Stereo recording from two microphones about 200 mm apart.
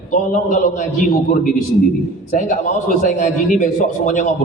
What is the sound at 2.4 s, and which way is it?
A man's voice, 45° left (ahead or behind).